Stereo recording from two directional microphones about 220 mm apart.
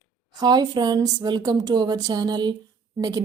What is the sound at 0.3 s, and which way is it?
A woman's voice, 20° right (ahead or behind).